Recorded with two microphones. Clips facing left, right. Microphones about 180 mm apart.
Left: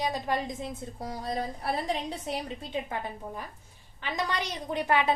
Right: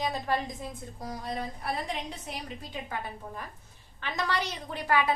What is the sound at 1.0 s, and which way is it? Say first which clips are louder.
A woman's voice: left 2 dB; 35° left (ahead or behind).